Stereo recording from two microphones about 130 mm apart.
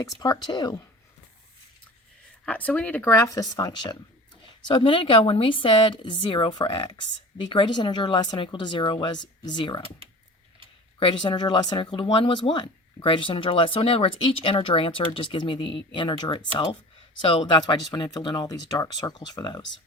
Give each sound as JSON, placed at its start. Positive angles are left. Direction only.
{"t": 0.2, "sound": "speech", "side_deg": 30}
{"t": 2.5, "sound": "speech", "side_deg": 10}
{"t": 11.0, "sound": "speech", "side_deg": 40}